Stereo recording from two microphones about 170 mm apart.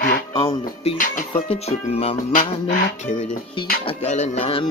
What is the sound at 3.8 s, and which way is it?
Music, 45° left (ahead or behind).